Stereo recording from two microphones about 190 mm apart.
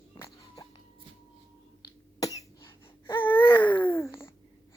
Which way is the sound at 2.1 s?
20° left (ahead or behind).